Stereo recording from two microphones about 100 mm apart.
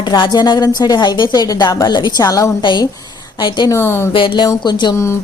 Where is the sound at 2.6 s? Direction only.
50° left (ahead or behind).